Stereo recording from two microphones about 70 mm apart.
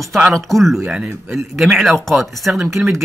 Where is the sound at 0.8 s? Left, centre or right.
Centre.